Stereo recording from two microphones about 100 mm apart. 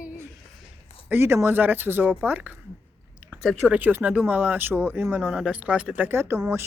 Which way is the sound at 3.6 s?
15° right (ahead or behind).